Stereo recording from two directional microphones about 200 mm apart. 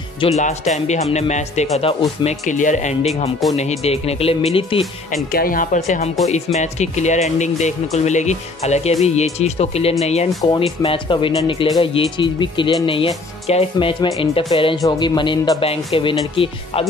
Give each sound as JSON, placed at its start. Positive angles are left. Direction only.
{"t": 0.4, "sound": "speech", "side_deg": 35}
{"t": 3.4, "sound": "speech", "side_deg": 0}
{"t": 3.8, "sound": "speech", "side_deg": 30}
{"t": 5.3, "sound": "speech", "side_deg": 45}